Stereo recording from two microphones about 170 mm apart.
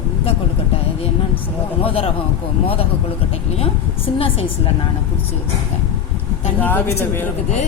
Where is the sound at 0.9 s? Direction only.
35° left (ahead or behind).